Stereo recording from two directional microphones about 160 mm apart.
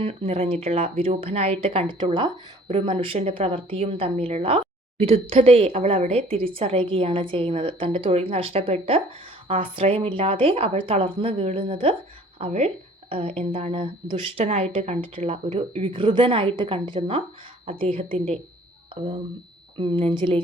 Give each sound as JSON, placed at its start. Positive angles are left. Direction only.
{"t": 0.0, "sound": "a woman's voice", "side_deg": -35}
{"t": 19.7, "sound": "a woman's voice", "side_deg": -30}